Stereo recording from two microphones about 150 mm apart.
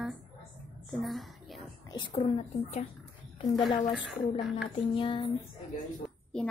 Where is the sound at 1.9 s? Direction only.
30° left (ahead or behind).